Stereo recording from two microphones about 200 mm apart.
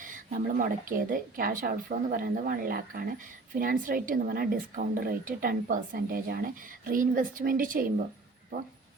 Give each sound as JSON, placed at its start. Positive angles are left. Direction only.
{"t": 0.0, "sound": "speech", "side_deg": -40}